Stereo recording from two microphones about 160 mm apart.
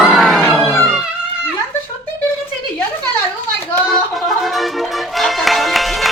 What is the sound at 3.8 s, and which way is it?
Music, centre (ahead or behind).